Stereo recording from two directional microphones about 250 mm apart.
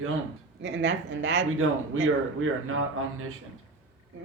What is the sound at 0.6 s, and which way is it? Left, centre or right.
Speech, right.